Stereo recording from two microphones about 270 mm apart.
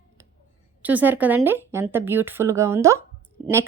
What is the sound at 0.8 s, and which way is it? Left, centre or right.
A woman's voice, centre.